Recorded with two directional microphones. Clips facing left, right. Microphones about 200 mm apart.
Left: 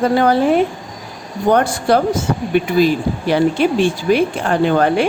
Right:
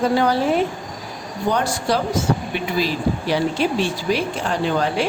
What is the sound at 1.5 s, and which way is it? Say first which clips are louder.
Speech: left 7 dB; 55° left (ahead or behind).